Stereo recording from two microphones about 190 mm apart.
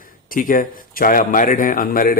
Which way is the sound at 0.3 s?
45° left (ahead or behind).